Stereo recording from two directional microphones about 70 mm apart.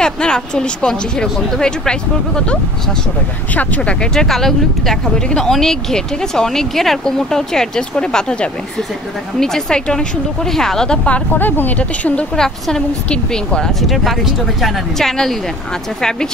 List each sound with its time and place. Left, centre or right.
0.0 s speech: centre
11.1 s a woman's voice: left
12.4 s speech: centre
13.8 s speech: centre